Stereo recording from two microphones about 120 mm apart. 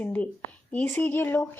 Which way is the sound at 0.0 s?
15° left (ahead or behind).